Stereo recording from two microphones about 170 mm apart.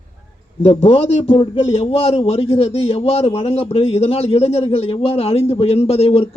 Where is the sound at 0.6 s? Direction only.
35° left (ahead or behind).